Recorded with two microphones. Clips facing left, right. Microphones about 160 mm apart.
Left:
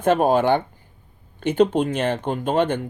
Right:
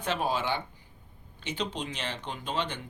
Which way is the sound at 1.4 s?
55° left (ahead or behind).